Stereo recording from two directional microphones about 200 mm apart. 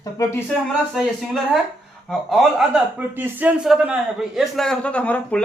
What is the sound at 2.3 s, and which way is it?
A man's voice, centre (ahead or behind).